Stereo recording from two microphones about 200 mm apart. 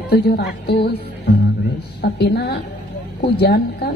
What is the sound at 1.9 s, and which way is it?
A woman's voice, 50° left (ahead or behind).